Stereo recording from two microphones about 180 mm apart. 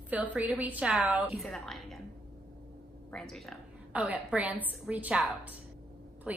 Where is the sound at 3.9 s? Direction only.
10° right (ahead or behind).